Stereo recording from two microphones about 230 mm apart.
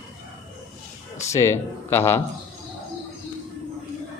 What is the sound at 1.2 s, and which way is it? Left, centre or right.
Speech, centre.